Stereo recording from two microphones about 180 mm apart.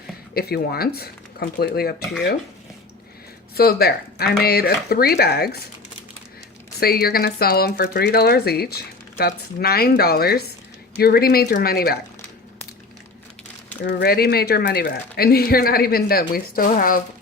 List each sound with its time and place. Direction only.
0.3 s speech: 60° left (ahead or behind)
3.5 s speech: 60° left (ahead or behind)
6.7 s speech: 60° left (ahead or behind)
13.8 s speech: 60° left (ahead or behind)